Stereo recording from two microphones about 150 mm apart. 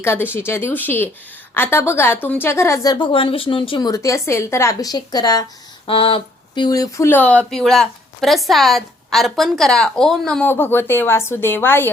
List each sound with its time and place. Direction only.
0.0 s a woman's voice: 15° left (ahead or behind)
5.9 s speech: 35° left (ahead or behind); by 11.9 s 15° left (ahead or behind)